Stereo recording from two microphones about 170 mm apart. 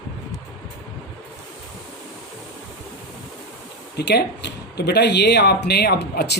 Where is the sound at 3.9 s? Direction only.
85° left.